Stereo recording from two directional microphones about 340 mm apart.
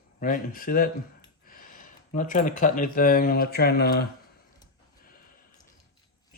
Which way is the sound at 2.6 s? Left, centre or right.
Left.